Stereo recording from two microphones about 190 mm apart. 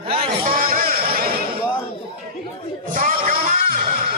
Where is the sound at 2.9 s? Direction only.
45° right (ahead or behind).